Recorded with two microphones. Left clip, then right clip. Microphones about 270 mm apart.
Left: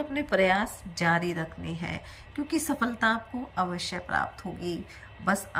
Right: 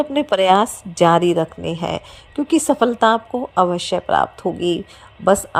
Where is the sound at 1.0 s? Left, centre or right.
Right.